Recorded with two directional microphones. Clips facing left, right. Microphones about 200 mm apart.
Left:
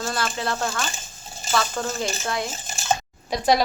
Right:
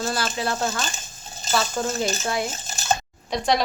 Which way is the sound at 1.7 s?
5° right (ahead or behind).